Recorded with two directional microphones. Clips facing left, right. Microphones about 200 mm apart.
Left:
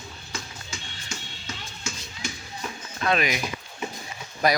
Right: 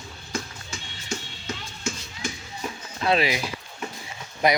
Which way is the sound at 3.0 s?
30° right (ahead or behind).